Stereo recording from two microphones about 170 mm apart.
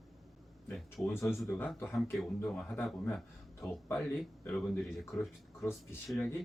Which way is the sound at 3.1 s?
Centre (ahead or behind).